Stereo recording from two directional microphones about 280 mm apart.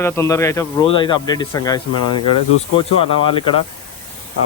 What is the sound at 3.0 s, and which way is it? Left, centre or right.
Speech, centre.